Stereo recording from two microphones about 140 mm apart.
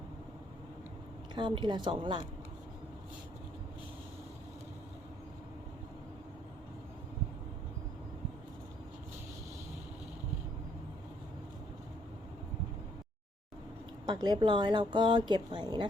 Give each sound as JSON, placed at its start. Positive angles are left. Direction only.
{"t": 1.4, "sound": "a woman's voice", "side_deg": -35}
{"t": 14.1, "sound": "a woman's voice", "side_deg": -30}